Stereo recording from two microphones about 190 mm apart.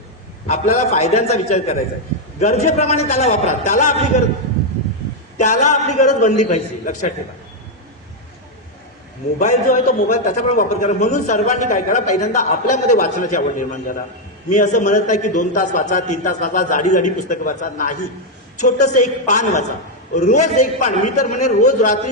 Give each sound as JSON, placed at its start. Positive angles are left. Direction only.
{"t": 0.4, "sound": "a man's voice", "side_deg": 35}
{"t": 5.4, "sound": "a man's voice", "side_deg": 40}
{"t": 9.4, "sound": "a man's voice", "side_deg": 40}